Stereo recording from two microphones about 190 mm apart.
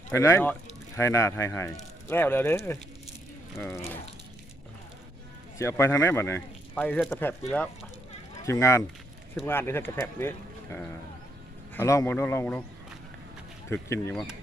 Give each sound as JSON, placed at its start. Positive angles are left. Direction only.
{"t": 0.1, "sound": "speech", "side_deg": 15}
{"t": 5.5, "sound": "speech", "side_deg": 15}
{"t": 13.8, "sound": "speech", "side_deg": 15}